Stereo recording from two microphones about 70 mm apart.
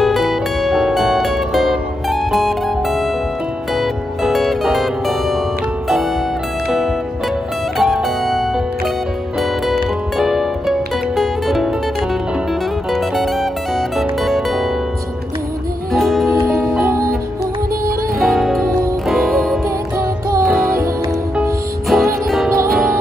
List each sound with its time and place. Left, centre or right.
0.0 s music: centre
3.7 s zither: centre
7.7 s music: centre
12.9 s music: centre
15.9 s music: centre
16.8 s music: right
18.2 s music: centre
20.0 s music: right
20.4 s music: centre
21.8 s music: centre